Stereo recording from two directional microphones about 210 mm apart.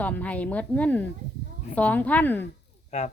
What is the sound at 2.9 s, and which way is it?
Speech, 35° left (ahead or behind).